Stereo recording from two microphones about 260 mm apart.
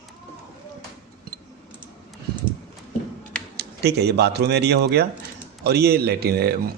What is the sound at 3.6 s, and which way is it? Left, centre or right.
A man's voice, right.